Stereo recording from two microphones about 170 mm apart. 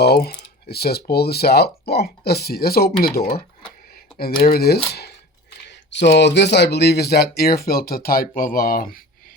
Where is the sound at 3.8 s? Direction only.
60° left (ahead or behind).